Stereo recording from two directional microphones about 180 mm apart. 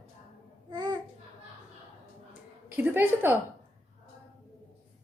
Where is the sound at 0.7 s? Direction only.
25° right (ahead or behind).